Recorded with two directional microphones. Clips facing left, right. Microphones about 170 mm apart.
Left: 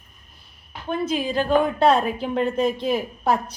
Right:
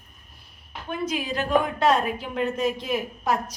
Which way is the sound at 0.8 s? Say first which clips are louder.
Left 4 dB; 30° left (ahead or behind).